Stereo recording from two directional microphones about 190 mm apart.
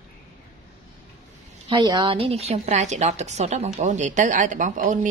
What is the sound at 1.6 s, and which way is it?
A woman's voice, 25° right (ahead or behind).